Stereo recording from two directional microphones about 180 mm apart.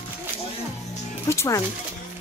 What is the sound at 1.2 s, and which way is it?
Speech, 15° left (ahead or behind).